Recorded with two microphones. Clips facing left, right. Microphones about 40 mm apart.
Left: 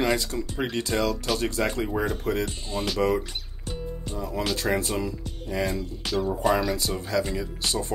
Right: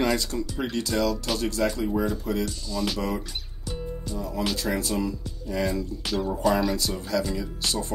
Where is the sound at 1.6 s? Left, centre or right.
Left.